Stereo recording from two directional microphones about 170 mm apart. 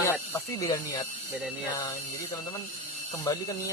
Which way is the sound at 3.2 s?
20° left (ahead or behind).